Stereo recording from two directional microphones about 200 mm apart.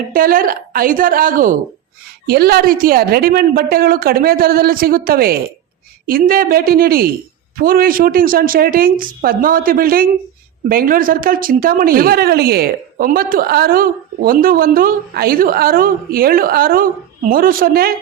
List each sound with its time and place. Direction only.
0.1 s a woman's voice: 45° right (ahead or behind)